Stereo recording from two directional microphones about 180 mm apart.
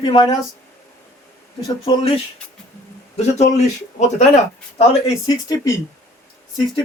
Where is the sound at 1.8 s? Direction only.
30° left (ahead or behind).